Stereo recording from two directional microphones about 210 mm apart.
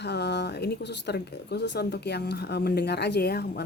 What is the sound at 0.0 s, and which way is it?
A woman's voice, 55° left (ahead or behind).